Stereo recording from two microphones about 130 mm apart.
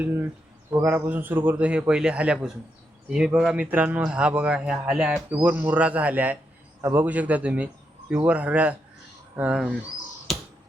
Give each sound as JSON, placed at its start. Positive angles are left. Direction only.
{"t": 0.0, "sound": "a man's voice", "side_deg": -15}
{"t": 10.3, "sound": "finger snapping", "side_deg": 0}